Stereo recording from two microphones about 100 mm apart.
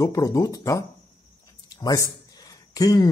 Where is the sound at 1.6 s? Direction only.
35° left (ahead or behind).